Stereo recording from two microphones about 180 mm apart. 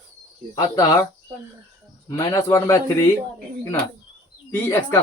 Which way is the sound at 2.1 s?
20° left (ahead or behind).